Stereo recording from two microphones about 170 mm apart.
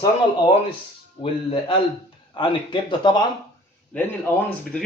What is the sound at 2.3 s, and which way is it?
Speech, 30° left (ahead or behind).